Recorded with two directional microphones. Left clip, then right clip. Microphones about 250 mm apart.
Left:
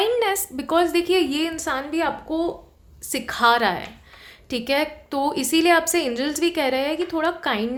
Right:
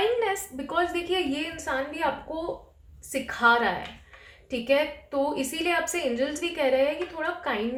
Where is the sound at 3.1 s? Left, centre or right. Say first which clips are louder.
Left 3 dB; left.